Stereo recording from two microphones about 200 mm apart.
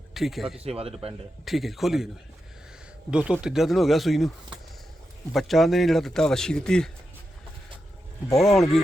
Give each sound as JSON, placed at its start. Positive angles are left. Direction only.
{"t": 0.1, "sound": "speech", "side_deg": 0}
{"t": 0.6, "sound": "speech", "side_deg": -30}
{"t": 1.5, "sound": "speech", "side_deg": 0}
{"t": 3.1, "sound": "speech", "side_deg": -5}
{"t": 8.3, "sound": "speech", "side_deg": 0}